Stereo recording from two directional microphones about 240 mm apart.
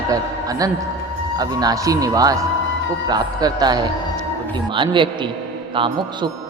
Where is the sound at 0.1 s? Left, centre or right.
Centre.